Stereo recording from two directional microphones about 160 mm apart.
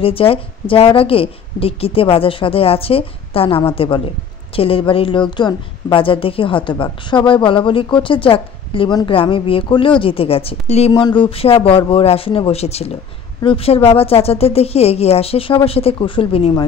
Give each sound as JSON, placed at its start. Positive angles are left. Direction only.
{"t": 0.0, "sound": "a woman's voice", "side_deg": 35}